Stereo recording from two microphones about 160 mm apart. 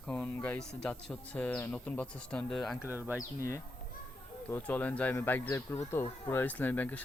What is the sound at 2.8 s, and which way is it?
Speech, 15° right (ahead or behind).